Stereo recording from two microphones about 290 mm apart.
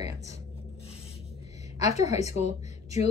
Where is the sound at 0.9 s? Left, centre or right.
Left.